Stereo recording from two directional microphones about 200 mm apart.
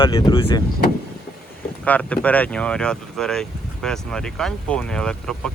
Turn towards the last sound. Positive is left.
turn(degrees=5)  # may be behind; listen again after turning